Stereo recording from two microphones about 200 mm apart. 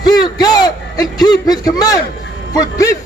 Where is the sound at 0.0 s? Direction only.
20° left (ahead or behind).